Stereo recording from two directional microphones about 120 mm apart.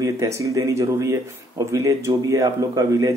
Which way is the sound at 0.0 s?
25° right (ahead or behind).